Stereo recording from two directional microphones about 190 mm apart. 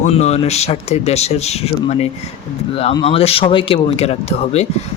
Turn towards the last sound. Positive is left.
turn(degrees=35)  # may be behind; listen again after turning